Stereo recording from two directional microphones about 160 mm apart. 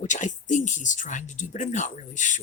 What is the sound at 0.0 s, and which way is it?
Speech, 50° left (ahead or behind).